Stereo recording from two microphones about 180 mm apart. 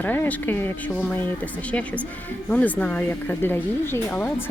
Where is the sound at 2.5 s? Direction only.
5° left (ahead or behind).